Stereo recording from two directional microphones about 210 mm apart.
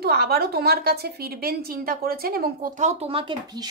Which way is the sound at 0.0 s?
45° right (ahead or behind).